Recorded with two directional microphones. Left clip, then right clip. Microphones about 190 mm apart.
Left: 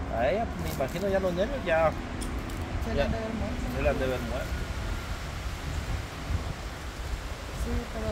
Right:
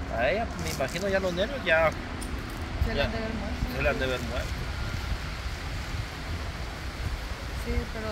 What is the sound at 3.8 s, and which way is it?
Speech, centre (ahead or behind).